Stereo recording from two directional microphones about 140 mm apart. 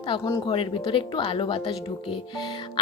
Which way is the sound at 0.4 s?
40° left (ahead or behind).